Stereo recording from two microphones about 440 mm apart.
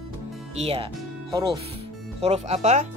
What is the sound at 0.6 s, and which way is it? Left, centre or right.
Speech, centre.